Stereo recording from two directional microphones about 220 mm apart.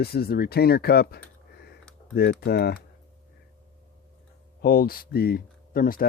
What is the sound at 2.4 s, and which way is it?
Speech, 45° left (ahead or behind).